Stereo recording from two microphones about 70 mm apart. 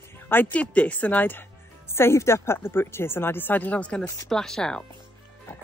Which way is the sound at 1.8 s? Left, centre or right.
Left.